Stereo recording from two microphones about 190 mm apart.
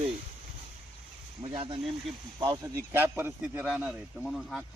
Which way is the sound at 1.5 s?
30° right (ahead or behind).